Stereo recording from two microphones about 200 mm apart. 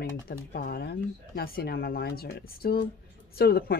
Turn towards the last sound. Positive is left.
turn(degrees=50)  # may be behind; listen again after turning